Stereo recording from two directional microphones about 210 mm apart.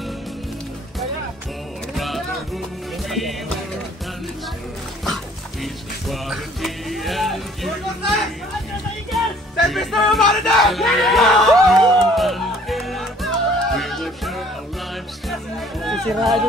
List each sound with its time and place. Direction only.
2.0 s music: centre (ahead or behind)
5.0 s music: centre (ahead or behind)
15.8 s music: centre (ahead or behind)